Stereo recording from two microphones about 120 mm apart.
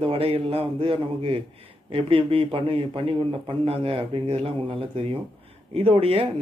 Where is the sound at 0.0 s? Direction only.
50° right (ahead or behind).